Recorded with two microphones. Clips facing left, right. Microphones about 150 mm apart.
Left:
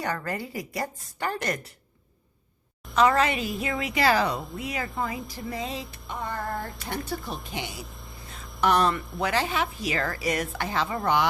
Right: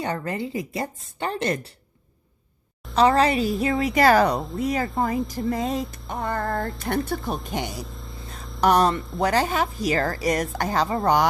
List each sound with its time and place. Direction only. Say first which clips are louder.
0.0 s a woman's voice: right 3 dB; 25° right (ahead or behind)
2.9 s a woman's voice: right 3 dB; 35° right (ahead or behind)